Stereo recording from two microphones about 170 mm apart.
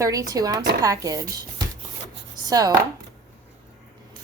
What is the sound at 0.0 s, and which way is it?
A woman's voice, 20° right (ahead or behind).